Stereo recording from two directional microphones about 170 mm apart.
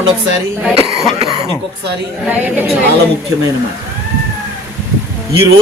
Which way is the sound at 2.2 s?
10° right (ahead or behind).